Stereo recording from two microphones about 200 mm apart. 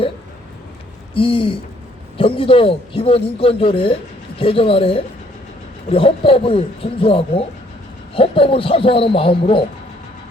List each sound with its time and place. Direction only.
1.1 s speech: 25° left (ahead or behind)